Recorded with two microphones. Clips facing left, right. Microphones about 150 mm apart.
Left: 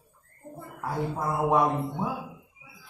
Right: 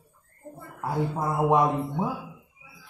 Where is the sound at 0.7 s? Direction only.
20° right (ahead or behind).